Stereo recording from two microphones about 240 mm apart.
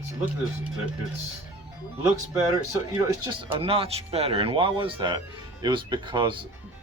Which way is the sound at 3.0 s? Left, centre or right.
Centre.